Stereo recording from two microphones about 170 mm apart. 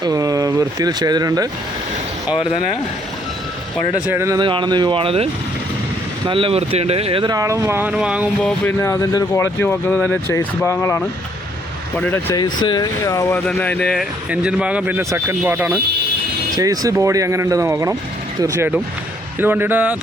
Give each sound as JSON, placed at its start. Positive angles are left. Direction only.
{"t": 0.0, "sound": "speech", "side_deg": -20}
{"t": 4.1, "sound": "speech", "side_deg": -15}
{"t": 4.4, "sound": "speech", "side_deg": -30}
{"t": 8.4, "sound": "speech", "side_deg": 5}
{"t": 8.8, "sound": "speech", "side_deg": 20}
{"t": 12.3, "sound": "speech", "side_deg": 25}
{"t": 13.5, "sound": "speech", "side_deg": 5}